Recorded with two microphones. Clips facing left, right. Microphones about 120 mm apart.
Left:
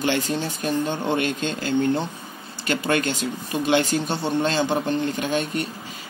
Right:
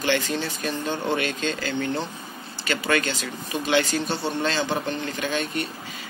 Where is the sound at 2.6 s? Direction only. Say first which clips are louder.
Left 2 dB; 50° left (ahead or behind).